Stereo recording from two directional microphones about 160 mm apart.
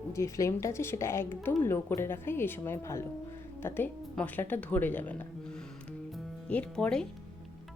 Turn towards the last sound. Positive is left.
turn(degrees=5)  # may be behind; listen again after turning